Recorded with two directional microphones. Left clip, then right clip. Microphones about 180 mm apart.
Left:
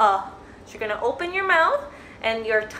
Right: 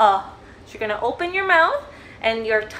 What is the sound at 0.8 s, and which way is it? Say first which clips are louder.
A woman's voice: right 2 dB; 10° right (ahead or behind).